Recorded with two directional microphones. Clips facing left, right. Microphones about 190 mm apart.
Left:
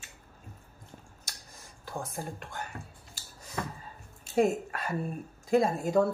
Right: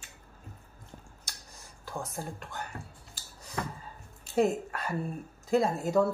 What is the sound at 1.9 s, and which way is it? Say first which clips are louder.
Speech: even; 20° left (ahead or behind).